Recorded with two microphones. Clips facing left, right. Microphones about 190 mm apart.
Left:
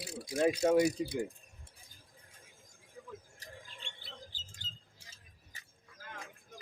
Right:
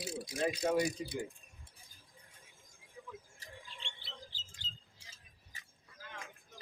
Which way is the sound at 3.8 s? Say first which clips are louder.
Left 1 dB; 45° left (ahead or behind).